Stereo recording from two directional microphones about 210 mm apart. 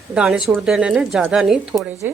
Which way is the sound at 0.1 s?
5° right (ahead or behind).